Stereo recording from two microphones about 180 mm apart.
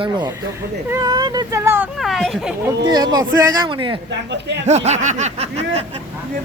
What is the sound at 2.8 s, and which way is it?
Speech, 20° right (ahead or behind).